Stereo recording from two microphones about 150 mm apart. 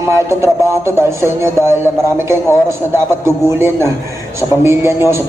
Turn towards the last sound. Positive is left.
turn(degrees=-15)  # may be behind; listen again after turning